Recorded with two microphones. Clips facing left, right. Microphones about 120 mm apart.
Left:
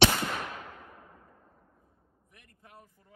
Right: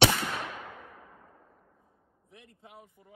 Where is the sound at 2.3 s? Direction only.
20° right (ahead or behind).